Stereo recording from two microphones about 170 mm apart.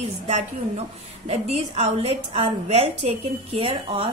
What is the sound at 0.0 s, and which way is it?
A woman's voice, 40° right (ahead or behind).